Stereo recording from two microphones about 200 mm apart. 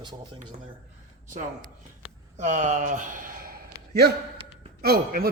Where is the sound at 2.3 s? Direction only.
35° right (ahead or behind).